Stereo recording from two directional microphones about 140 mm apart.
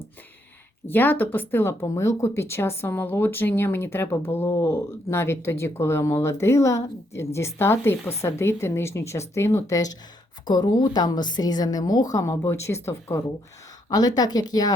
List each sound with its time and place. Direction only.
0.9 s a woman's voice: 15° left (ahead or behind)